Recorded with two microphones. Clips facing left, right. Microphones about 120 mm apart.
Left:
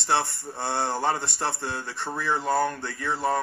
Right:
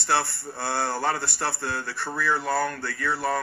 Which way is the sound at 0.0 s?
15° left (ahead or behind).